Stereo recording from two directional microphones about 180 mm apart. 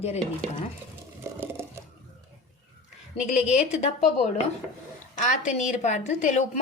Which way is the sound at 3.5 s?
40° left (ahead or behind).